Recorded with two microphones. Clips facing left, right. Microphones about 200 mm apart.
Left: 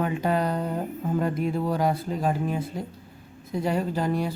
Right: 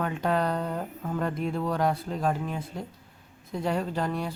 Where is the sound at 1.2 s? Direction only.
5° left (ahead or behind).